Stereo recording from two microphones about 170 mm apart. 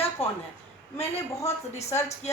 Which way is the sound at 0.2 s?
35° left (ahead or behind).